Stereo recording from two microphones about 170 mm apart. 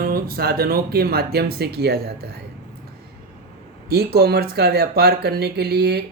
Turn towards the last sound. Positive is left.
turn(degrees=-75)  # may be behind; listen again after turning